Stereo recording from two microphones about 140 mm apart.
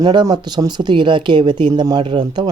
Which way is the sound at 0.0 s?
30° right (ahead or behind).